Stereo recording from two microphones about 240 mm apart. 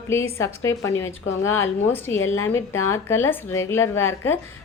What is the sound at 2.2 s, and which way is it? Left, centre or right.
Speech, left.